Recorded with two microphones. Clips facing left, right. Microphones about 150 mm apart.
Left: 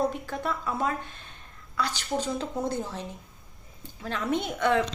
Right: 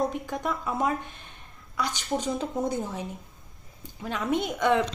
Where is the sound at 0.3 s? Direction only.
15° right (ahead or behind).